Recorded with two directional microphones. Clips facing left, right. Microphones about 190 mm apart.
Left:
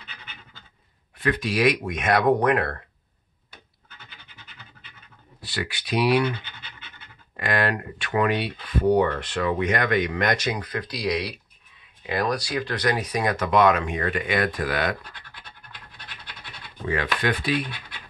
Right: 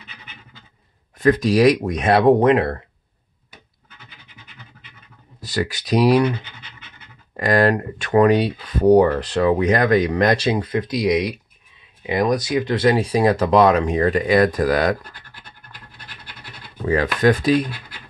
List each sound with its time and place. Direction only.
1.1 s speech: 40° right (ahead or behind); by 2.8 s 25° right (ahead or behind)
5.4 s speech: 40° right (ahead or behind)
7.3 s speech: 40° right (ahead or behind)
16.8 s speech: 40° right (ahead or behind)